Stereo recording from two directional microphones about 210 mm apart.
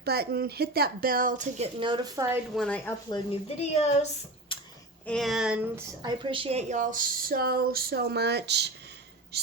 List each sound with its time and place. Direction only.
0.0 s speech: 50° right (ahead or behind); by 2.4 s 15° right (ahead or behind)
2.6 s speech: 5° left (ahead or behind)
3.6 s speech: 30° left (ahead or behind)
4.5 s a sound: 25° left (ahead or behind)
5.0 s speech: centre (ahead or behind)
6.0 s speech: 20° right (ahead or behind); by 9.5 s 50° right (ahead or behind)